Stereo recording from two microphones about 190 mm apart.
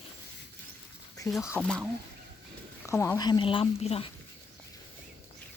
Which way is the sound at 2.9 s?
15° left (ahead or behind).